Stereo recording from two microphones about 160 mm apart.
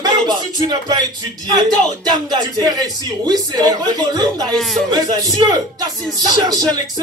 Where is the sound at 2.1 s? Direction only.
25° right (ahead or behind).